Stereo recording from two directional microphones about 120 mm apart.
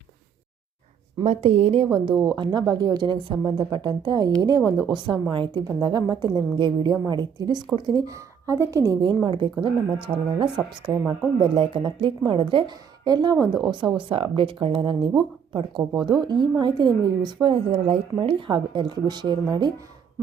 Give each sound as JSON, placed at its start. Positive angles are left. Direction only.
{"t": 1.2, "sound": "a woman's voice", "side_deg": -60}
{"t": 2.1, "sound": "speech", "side_deg": -35}
{"t": 17.4, "sound": "speech", "side_deg": -55}